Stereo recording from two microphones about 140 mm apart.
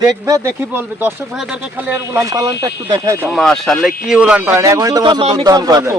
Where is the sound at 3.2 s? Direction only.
Centre (ahead or behind); by 6.0 s 25° right (ahead or behind).